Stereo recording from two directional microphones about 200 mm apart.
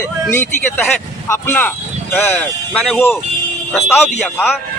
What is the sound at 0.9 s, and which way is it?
Speech, 10° left (ahead or behind).